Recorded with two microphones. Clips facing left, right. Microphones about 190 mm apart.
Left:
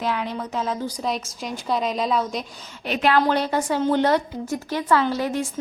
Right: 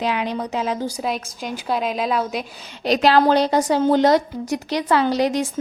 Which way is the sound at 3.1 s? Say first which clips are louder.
Right 3 dB; 35° right (ahead or behind).